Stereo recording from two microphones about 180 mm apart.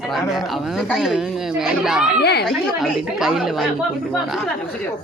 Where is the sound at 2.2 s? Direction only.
65° left (ahead or behind).